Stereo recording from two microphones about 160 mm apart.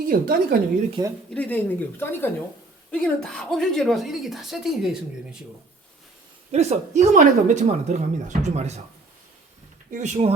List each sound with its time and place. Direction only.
0.0 s speech: 65° right (ahead or behind)
1.0 s speech: 30° right (ahead or behind)
1.3 s a woman's voice: 10° left (ahead or behind)
2.9 s speech: centre (ahead or behind)
6.5 s speech: 45° right (ahead or behind)
9.9 s speech: 50° right (ahead or behind)